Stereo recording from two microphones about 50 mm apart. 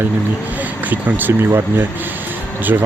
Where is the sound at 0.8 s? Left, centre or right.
Right.